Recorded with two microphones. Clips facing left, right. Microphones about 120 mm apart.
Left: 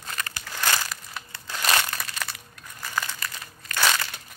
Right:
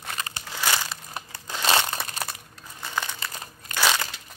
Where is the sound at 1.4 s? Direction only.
25° right (ahead or behind).